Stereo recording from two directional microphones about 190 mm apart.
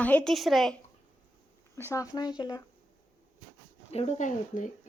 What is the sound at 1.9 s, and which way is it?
Speech, 20° left (ahead or behind).